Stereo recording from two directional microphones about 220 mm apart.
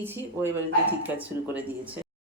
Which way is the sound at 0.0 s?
10° right (ahead or behind).